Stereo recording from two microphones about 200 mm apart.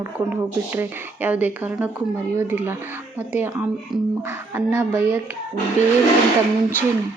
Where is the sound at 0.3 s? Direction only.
10° right (ahead or behind).